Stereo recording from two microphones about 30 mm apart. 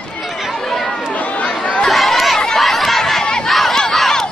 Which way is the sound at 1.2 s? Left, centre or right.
Left.